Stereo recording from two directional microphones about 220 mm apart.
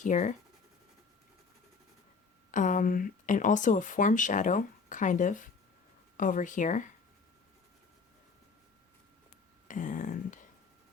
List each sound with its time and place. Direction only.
0.0 s speech: 35° left (ahead or behind)
2.5 s speech: 35° left (ahead or behind)
9.6 s a sound: 35° left (ahead or behind)